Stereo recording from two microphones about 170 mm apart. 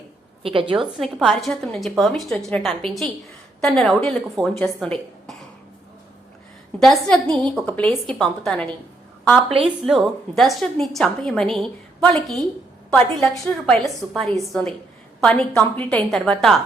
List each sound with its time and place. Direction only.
0.4 s a woman's voice: 30° right (ahead or behind)
0.9 s a woman's voice: centre (ahead or behind)
6.7 s a woman's voice: centre (ahead or behind)
9.8 s a woman's voice: centre (ahead or behind)